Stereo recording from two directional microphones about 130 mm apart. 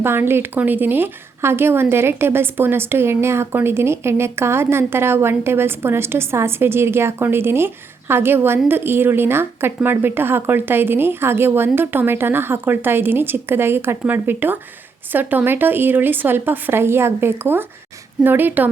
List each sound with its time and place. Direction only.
0.0 s a woman's voice: 15° right (ahead or behind)